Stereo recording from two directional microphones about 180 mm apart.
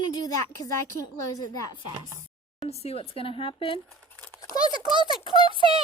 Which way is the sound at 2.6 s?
35° left (ahead or behind).